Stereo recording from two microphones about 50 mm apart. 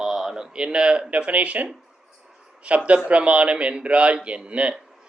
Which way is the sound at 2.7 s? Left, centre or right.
Right.